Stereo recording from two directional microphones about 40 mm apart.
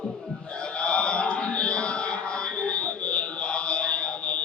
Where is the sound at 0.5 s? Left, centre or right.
Left.